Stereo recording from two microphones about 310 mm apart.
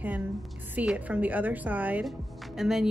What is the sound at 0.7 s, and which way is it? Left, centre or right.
A woman's voice, centre.